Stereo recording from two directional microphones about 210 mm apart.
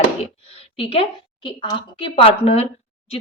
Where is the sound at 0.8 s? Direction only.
25° left (ahead or behind).